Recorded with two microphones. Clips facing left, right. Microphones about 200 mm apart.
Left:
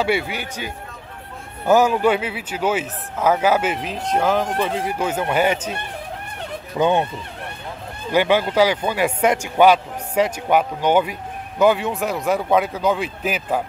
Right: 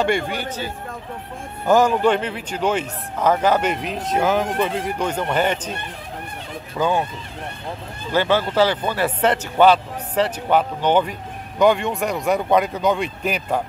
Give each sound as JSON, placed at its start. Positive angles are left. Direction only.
{"t": 0.0, "sound": "speech", "side_deg": 5}
{"t": 1.7, "sound": "speech", "side_deg": 10}
{"t": 6.8, "sound": "speech", "side_deg": 20}
{"t": 8.1, "sound": "speech", "side_deg": 15}